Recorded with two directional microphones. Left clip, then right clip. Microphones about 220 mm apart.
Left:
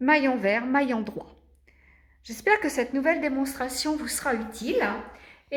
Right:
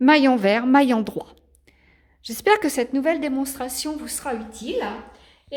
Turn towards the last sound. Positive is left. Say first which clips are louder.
# left 1 dB
turn(degrees=-10)  # may be behind; listen again after turning